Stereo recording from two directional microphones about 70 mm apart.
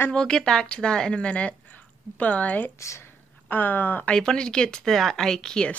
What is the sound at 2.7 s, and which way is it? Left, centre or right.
Speech, left.